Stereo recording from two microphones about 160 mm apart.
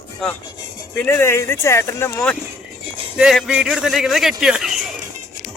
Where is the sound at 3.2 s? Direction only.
5° right (ahead or behind).